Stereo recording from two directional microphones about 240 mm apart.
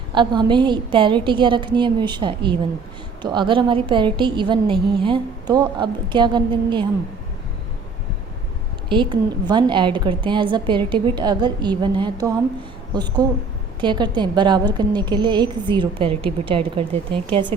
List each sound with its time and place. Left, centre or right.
0.1 s a woman's voice: centre
8.9 s a woman's voice: centre